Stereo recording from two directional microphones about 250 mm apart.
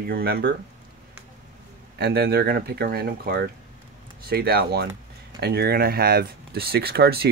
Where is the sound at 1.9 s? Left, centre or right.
Right.